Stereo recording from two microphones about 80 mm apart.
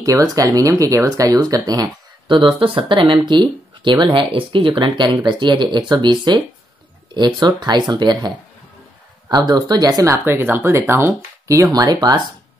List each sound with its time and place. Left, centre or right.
0.0 s speech: right
2.2 s speech: right
9.3 s speech: right
10.1 s speech: right
11.7 s speech: right